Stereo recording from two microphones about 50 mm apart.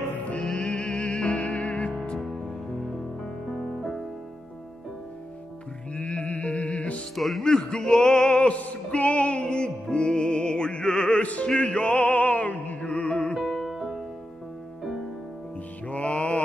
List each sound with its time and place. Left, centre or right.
0.4 s music: centre
0.7 s music: left
2.1 s music: centre
3.4 s music: centre
5.9 s music: left
7.2 s speech: centre
7.4 s music: centre
13.4 s music: centre
15.9 s music: left